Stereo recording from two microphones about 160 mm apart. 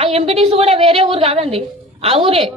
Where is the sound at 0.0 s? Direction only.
40° right (ahead or behind).